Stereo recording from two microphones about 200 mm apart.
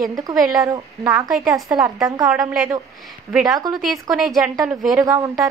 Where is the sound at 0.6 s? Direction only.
15° right (ahead or behind).